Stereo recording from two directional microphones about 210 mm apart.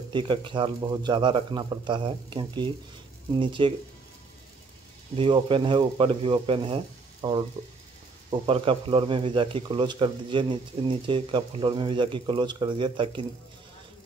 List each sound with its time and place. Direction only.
0.1 s speech: 25° right (ahead or behind)
5.1 s speech: 25° right (ahead or behind)